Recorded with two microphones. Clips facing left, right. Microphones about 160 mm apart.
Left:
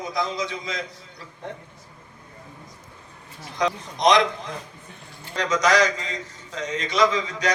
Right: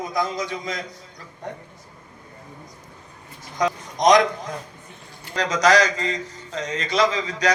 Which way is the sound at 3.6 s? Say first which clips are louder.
Right 1 dB; 45° right (ahead or behind).